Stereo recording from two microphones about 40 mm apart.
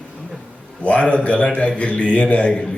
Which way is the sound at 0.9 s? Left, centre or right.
Left.